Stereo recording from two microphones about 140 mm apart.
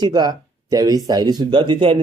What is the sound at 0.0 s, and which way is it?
Speech, 30° right (ahead or behind).